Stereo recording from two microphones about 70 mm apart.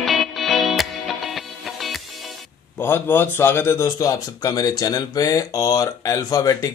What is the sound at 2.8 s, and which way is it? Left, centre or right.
A man's voice, left.